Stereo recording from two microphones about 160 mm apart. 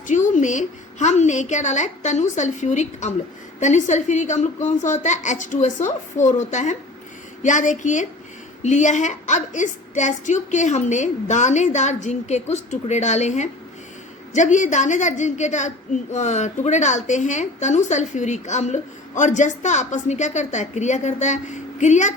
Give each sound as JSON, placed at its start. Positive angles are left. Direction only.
{"t": 0.3, "sound": "a woman's voice", "side_deg": 50}